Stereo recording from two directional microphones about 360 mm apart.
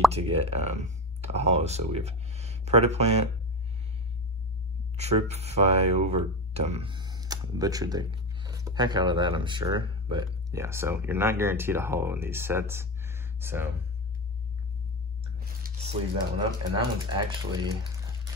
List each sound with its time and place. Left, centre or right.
0.1 s speech: centre
4.9 s speech: centre
15.3 s speech: right